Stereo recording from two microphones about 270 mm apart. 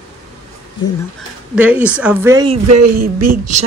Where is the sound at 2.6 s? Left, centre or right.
Right.